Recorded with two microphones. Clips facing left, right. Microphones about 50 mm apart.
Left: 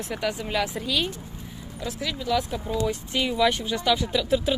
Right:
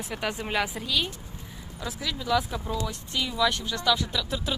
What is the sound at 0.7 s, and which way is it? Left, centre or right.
Speech, centre.